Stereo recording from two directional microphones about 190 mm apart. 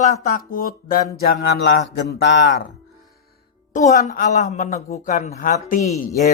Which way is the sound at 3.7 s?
45° left (ahead or behind).